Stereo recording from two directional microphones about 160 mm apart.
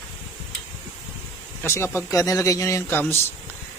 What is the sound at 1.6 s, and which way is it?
A man's voice, 15° left (ahead or behind).